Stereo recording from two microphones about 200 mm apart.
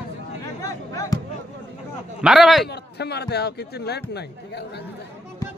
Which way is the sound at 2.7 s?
55° left (ahead or behind).